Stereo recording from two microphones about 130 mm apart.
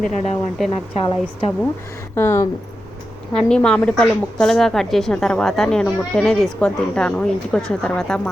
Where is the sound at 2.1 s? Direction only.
20° left (ahead or behind).